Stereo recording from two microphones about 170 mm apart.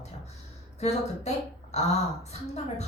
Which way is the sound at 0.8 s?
40° left (ahead or behind).